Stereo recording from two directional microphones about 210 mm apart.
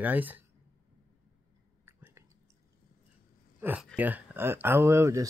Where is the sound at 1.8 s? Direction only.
10° right (ahead or behind).